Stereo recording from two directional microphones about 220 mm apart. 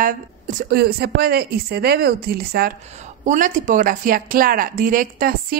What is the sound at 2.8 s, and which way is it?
A woman's voice, 30° right (ahead or behind).